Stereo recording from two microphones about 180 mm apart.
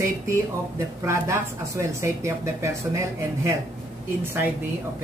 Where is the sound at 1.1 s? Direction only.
15° right (ahead or behind).